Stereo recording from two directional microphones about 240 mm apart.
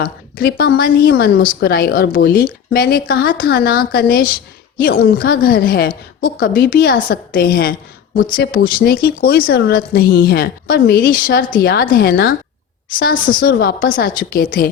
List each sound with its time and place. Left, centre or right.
0.0 s a woman's voice: left